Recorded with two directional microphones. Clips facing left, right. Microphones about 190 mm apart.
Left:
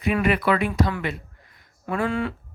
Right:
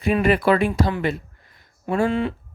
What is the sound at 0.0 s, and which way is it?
Speech, 30° right (ahead or behind).